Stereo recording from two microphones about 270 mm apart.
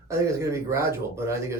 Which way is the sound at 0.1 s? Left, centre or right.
Centre.